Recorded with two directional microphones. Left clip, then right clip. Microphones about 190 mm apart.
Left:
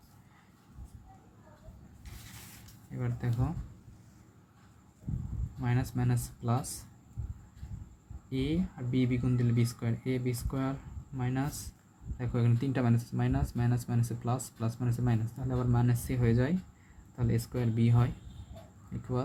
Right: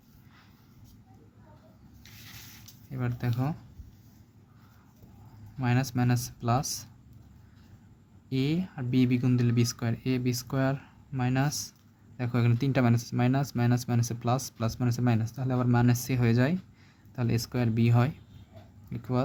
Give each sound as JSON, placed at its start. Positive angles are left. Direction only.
{"t": 3.0, "sound": "speech", "side_deg": -35}
{"t": 5.5, "sound": "speech", "side_deg": -45}
{"t": 8.3, "sound": "speech", "side_deg": -45}